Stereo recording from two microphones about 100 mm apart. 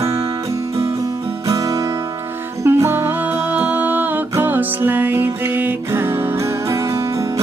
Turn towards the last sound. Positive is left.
turn(degrees=-20)  # may be behind; listen again after turning